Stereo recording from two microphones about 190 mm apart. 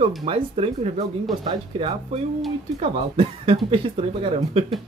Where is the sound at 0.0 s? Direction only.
30° right (ahead or behind).